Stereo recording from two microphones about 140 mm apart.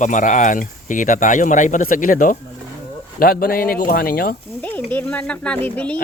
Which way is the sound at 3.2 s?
90° left.